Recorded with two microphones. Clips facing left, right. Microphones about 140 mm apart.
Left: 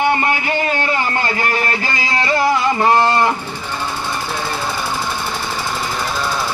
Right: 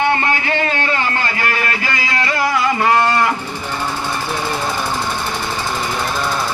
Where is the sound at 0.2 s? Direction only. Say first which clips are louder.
Even; 20° left (ahead or behind).